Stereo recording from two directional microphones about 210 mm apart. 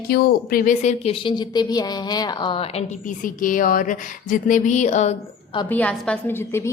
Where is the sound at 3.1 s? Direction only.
40° left (ahead or behind).